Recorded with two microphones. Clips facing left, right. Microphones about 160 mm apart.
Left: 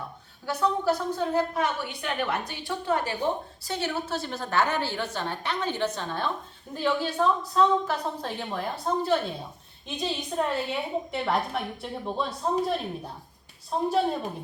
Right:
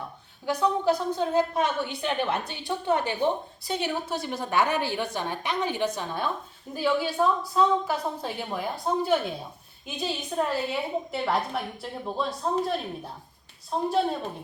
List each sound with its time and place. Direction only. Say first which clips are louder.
0.4 s a woman's voice: right 1 dB; 15° right (ahead or behind)
9.8 s a woman's voice: left 1 dB; 5° right (ahead or behind)